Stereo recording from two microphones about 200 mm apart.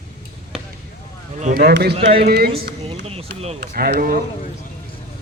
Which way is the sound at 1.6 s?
55° right (ahead or behind).